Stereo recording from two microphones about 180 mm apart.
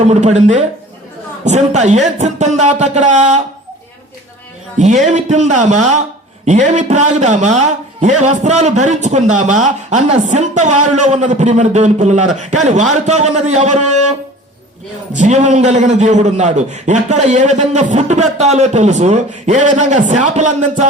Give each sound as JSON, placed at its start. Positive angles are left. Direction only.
{"t": 0.1, "sound": "a man's voice", "side_deg": -40}
{"t": 5.0, "sound": "a man's voice", "side_deg": -40}